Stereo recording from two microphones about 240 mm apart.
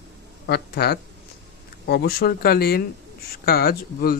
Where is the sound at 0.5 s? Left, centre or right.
Left.